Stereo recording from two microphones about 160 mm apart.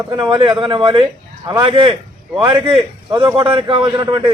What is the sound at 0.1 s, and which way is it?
A man's voice, 25° right (ahead or behind).